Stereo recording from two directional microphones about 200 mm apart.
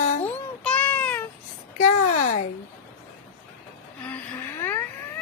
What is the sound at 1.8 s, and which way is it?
Speech, 40° left (ahead or behind).